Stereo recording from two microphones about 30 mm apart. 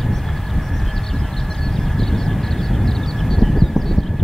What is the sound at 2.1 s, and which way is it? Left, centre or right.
Vehicle, centre.